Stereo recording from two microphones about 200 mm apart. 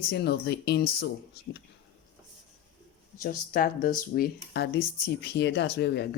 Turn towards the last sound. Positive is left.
turn(degrees=55)  # may be behind; listen again after turning